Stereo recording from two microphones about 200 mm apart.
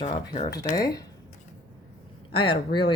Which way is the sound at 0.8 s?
20° left (ahead or behind).